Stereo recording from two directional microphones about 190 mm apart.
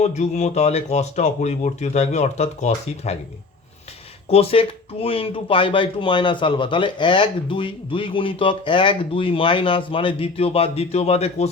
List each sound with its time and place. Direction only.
0.0 s speech: 35° left (ahead or behind)
4.3 s speech: 30° left (ahead or behind)